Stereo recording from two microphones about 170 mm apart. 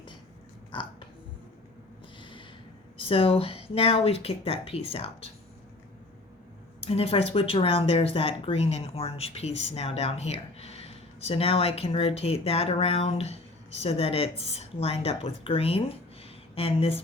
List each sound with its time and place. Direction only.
0.7 s a sound: 30° left (ahead or behind)
3.0 s speech: 35° left (ahead or behind)
6.8 s speech: 35° left (ahead or behind)